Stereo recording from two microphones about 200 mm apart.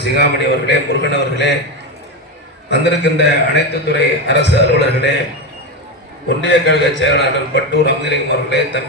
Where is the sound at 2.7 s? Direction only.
60° left (ahead or behind).